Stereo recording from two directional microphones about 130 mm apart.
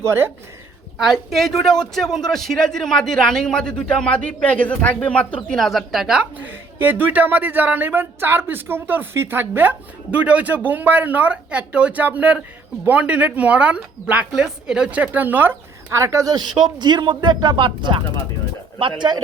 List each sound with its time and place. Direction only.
0.0 s speech: 20° right (ahead or behind)
0.9 s a man's voice: 5° right (ahead or behind); by 19.2 s 35° right (ahead or behind)